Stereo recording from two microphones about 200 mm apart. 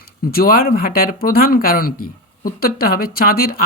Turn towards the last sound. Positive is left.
turn(degrees=45)  # may be behind; listen again after turning